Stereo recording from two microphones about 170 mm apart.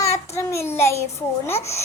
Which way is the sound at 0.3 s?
15° left (ahead or behind).